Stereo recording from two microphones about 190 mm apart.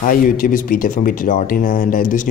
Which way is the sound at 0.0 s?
45° left (ahead or behind).